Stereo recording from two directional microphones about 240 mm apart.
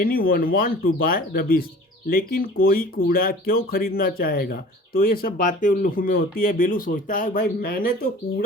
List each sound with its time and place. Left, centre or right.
0.0 s speech: left